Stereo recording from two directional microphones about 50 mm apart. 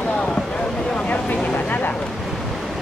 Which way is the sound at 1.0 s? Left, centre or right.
Left.